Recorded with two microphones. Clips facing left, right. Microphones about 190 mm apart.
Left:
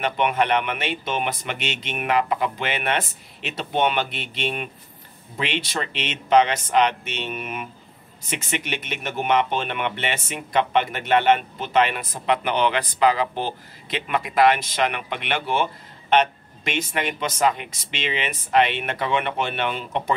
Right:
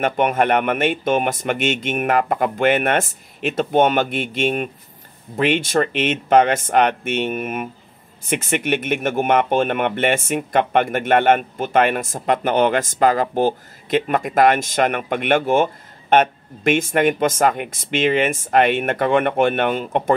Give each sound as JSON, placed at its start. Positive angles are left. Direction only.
{"t": 0.0, "sound": "speech", "side_deg": -45}